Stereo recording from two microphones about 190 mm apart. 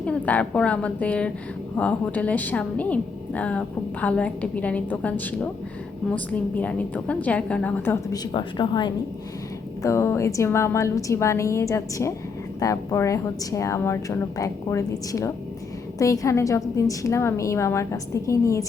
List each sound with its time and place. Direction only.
0.0 s a woman's voice: 5° left (ahead or behind)